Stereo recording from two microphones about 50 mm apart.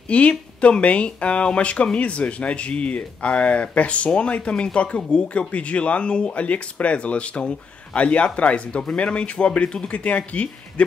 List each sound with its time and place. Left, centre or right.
0.1 s speech: left